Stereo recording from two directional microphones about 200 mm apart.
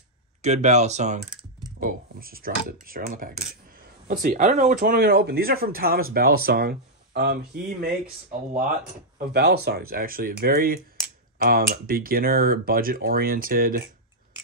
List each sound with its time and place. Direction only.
0.4 s speech: 35° right (ahead or behind); by 7.9 s 50° right (ahead or behind)
9.3 s speech: 55° right (ahead or behind)